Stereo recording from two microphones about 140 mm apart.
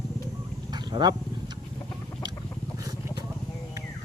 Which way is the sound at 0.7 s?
30° right (ahead or behind).